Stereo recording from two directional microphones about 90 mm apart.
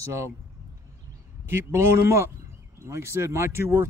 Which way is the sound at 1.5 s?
25° right (ahead or behind).